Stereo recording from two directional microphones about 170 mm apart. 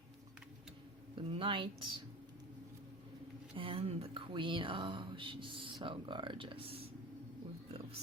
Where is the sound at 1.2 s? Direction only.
30° right (ahead or behind).